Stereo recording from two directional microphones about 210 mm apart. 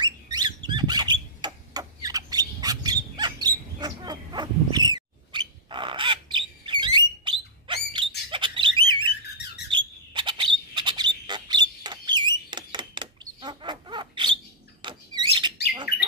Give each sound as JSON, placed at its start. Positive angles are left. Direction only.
{"t": 0.0, "sound": "rodents", "side_deg": -20}
{"t": 8.3, "sound": "bird", "side_deg": -25}
{"t": 9.7, "sound": "rodents", "side_deg": -20}
{"t": 14.8, "sound": "a sound", "side_deg": -20}